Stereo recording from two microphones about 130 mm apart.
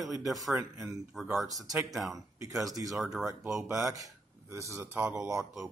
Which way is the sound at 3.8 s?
25° right (ahead or behind).